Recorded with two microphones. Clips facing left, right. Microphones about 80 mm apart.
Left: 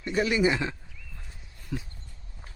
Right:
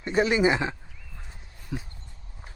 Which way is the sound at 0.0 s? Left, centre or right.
Right.